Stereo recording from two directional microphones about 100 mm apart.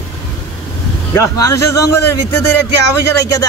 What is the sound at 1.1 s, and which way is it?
Speech, 30° left (ahead or behind).